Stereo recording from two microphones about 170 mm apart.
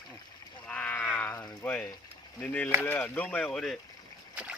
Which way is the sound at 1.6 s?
10° left (ahead or behind).